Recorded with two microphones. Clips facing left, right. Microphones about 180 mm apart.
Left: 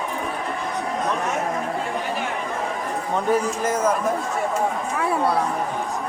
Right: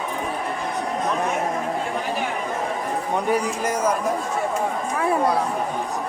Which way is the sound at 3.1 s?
15° right (ahead or behind).